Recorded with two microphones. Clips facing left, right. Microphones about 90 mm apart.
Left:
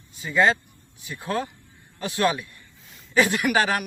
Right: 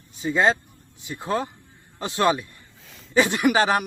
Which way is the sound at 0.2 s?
20° right (ahead or behind).